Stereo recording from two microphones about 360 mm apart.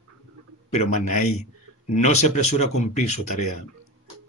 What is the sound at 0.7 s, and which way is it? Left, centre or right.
Speech, left.